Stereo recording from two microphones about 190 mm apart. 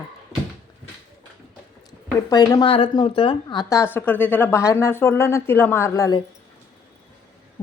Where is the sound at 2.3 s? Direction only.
20° left (ahead or behind).